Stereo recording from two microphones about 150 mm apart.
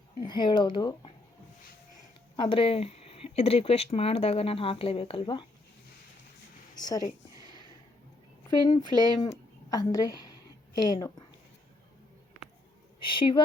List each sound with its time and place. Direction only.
0.2 s speech: 30° left (ahead or behind)
2.3 s speech: 35° left (ahead or behind)
6.7 s speech: 25° left (ahead or behind)
8.4 s a woman's voice: 25° left (ahead or behind)
13.0 s speech: 35° left (ahead or behind)